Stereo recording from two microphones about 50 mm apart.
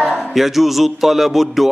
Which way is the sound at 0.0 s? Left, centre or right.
Centre.